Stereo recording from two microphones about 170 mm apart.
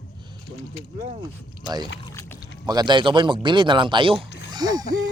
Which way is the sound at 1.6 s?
25° right (ahead or behind).